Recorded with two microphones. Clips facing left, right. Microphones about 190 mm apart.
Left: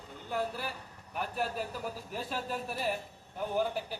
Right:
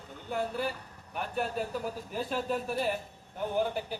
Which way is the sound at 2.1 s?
Centre (ahead or behind).